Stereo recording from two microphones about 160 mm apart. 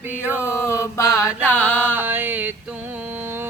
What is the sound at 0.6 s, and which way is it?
Speech, 15° left (ahead or behind).